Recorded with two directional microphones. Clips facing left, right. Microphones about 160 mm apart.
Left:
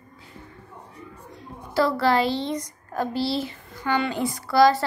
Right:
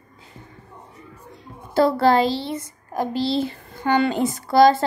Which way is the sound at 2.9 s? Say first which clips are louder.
Right 3 dB; 15° right (ahead or behind).